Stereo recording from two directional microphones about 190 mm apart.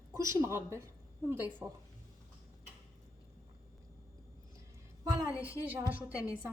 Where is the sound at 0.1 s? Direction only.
15° right (ahead or behind).